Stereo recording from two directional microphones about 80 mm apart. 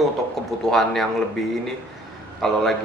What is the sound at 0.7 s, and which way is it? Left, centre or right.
Speech, centre.